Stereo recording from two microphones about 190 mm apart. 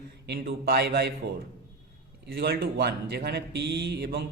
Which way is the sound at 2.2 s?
55° right (ahead or behind).